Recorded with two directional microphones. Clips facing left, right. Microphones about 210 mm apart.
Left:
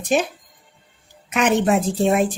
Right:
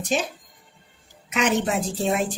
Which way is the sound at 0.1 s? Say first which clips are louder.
Left 5 dB; 55° left (ahead or behind).